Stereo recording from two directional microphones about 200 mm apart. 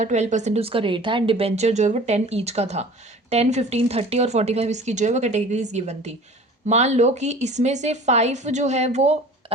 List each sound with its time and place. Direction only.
0.0 s speech: 35° right (ahead or behind)